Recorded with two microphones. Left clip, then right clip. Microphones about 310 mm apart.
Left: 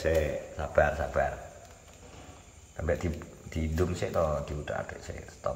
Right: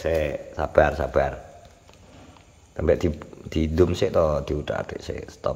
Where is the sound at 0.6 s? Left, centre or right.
Centre.